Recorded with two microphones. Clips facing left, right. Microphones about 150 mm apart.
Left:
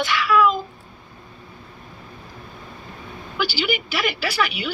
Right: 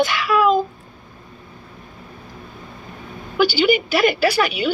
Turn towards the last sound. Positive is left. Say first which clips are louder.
# right 7 dB
turn(degrees=-40)  # may be behind; listen again after turning